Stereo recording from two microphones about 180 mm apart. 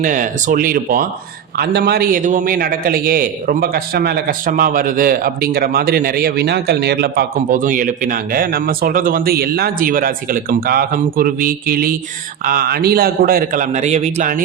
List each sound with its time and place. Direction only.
0.0 s a man's voice: 45° right (ahead or behind)